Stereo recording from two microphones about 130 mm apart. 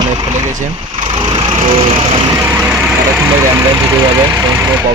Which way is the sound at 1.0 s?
40° right (ahead or behind).